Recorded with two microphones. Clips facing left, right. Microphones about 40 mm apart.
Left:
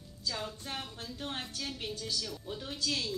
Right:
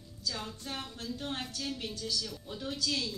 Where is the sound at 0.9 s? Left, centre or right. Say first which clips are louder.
Right 2 dB; left.